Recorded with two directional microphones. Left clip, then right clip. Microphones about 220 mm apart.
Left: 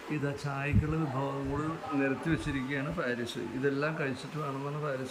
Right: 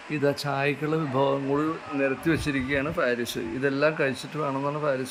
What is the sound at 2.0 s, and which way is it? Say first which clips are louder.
Speech: right 7 dB; 25° right (ahead or behind).